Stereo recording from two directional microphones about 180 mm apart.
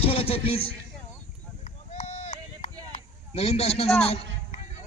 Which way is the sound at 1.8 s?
40° left (ahead or behind).